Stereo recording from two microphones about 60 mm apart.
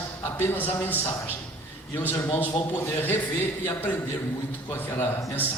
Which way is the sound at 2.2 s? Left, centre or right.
Left.